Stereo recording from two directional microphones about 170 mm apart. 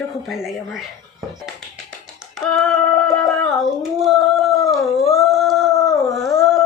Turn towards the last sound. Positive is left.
turn(degrees=0)  # may be behind; listen again after turning